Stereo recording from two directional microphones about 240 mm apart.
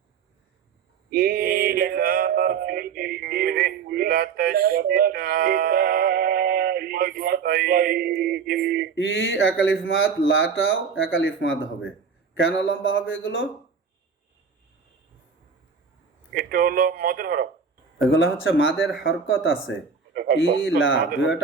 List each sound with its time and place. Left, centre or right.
1.1 s a sound: right
9.0 s speech: left
16.3 s a man's voice: right
18.1 s speech: left
18.8 s speech: centre
19.0 s speech: left